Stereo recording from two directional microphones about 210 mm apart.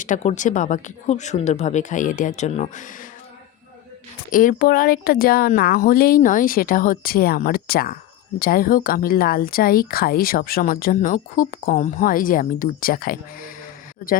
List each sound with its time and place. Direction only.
0.0 s speech: 35° left (ahead or behind)
4.3 s speech: 40° left (ahead or behind)